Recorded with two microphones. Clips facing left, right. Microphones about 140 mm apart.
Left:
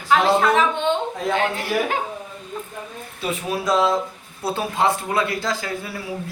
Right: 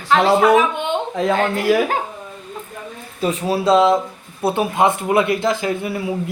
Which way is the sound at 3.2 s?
35° right (ahead or behind).